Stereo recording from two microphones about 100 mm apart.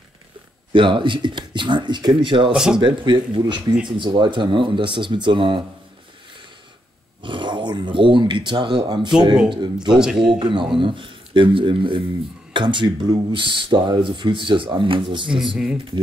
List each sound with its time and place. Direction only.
0.7 s speech: 55° right (ahead or behind)
2.5 s a man's voice: 5° right (ahead or behind)
2.8 s speech: 55° right (ahead or behind)
7.2 s speech: 55° right (ahead or behind)
9.8 s a man's voice: 5° right (ahead or behind)
10.4 s speech: 55° right (ahead or behind)
15.4 s speech: 5° right (ahead or behind)